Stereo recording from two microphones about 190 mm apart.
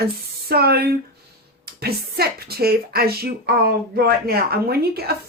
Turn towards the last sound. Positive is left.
turn(degrees=-55)  # may be behind; listen again after turning